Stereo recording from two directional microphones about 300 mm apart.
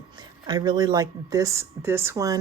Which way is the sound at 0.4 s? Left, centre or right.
Centre.